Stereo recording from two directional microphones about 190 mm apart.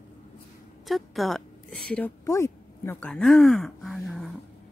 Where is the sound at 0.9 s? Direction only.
Centre (ahead or behind).